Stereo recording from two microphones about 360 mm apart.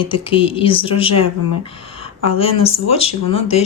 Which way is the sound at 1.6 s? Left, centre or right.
Centre.